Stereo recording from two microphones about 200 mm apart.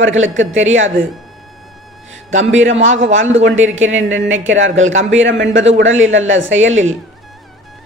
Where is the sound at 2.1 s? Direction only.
70° right (ahead or behind).